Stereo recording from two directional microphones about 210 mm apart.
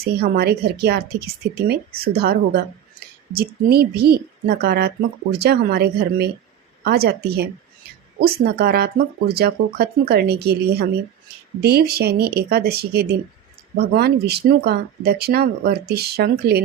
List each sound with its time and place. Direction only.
0.0 s speech: 50° right (ahead or behind)